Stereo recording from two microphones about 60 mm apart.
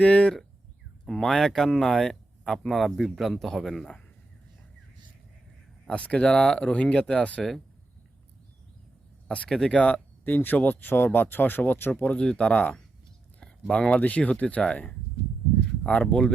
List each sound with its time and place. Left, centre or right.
0.0 s speech: centre
1.0 s speech: centre
5.8 s speech: centre
9.2 s speech: left
12.1 s speech: centre